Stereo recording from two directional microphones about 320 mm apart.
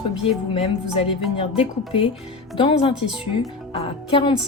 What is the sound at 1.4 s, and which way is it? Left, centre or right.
A woman's voice, centre.